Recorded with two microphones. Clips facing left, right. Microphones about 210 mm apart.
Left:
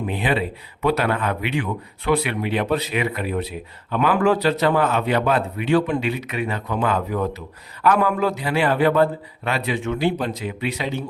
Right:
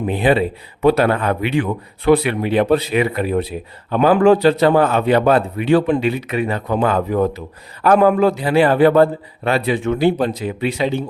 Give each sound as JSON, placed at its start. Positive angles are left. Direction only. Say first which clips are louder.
{"t": 0.1, "sound": "speech", "louder": "right 9 dB", "side_deg": -35}